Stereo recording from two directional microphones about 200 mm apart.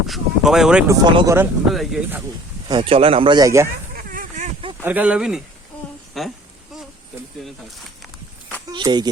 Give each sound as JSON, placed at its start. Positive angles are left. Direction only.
{"t": 0.1, "sound": "a sound", "side_deg": 0}
{"t": 0.9, "sound": "speech", "side_deg": -20}
{"t": 1.4, "sound": "speech", "side_deg": 0}
{"t": 2.6, "sound": "speech", "side_deg": -25}
{"t": 3.9, "sound": "a sound", "side_deg": -40}
{"t": 4.8, "sound": "speech", "side_deg": -10}
{"t": 8.7, "sound": "speech", "side_deg": -20}